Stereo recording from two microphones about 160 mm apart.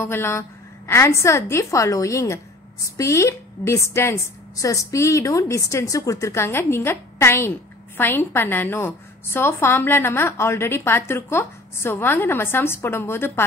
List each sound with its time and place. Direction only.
0.0 s a woman's voice: 15° left (ahead or behind)